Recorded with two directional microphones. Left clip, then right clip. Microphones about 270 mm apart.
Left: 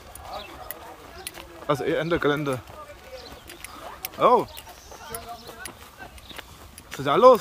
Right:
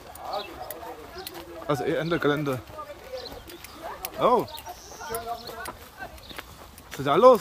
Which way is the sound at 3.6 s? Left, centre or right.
Centre.